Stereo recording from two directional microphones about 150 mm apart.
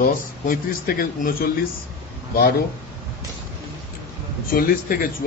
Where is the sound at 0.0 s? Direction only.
70° left (ahead or behind).